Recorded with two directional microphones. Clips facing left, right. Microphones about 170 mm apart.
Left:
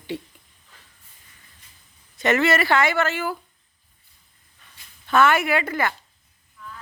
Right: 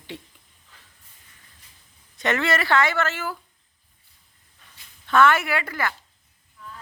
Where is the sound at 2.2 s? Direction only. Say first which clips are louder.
Left 4 dB; 5° left (ahead or behind).